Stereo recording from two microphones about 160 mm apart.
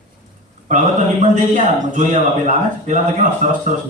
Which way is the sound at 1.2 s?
50° right (ahead or behind).